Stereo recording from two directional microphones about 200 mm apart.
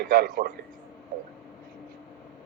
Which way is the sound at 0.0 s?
50° right (ahead or behind).